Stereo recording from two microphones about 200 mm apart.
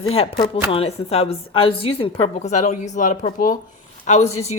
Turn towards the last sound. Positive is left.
turn(degrees=35)  # may be behind; listen again after turning